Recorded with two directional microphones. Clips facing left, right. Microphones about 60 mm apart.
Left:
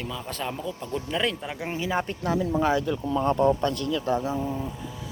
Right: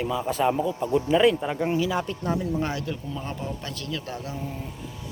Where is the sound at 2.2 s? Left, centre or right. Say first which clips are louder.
Left 2 dB; left.